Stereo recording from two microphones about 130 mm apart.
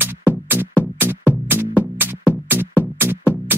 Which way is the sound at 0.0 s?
15° right (ahead or behind).